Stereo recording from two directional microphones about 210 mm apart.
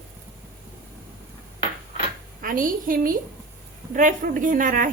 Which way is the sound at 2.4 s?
40° right (ahead or behind).